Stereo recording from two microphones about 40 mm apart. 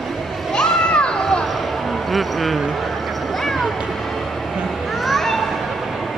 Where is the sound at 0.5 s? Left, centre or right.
Left.